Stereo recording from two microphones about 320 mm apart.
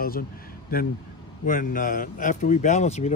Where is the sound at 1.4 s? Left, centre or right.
Left.